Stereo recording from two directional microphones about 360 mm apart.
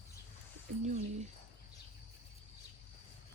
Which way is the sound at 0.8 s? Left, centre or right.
Centre.